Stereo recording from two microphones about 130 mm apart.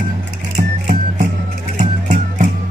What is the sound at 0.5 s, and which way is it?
Music, 75° right (ahead or behind).